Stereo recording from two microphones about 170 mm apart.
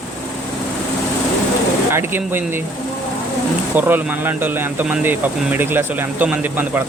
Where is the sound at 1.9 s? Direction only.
15° right (ahead or behind).